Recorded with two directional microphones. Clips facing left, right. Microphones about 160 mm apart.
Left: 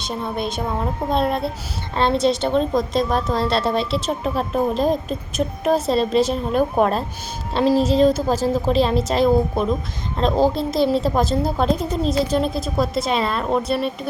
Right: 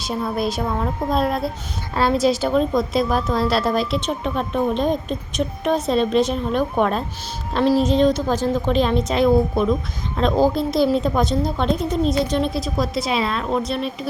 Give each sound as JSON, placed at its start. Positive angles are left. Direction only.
{"t": 0.0, "sound": "a woman's voice", "side_deg": 0}
{"t": 7.7, "sound": "a woman's voice", "side_deg": 0}
{"t": 8.5, "sound": "a woman's voice", "side_deg": 35}
{"t": 8.8, "sound": "a woman's voice", "side_deg": 0}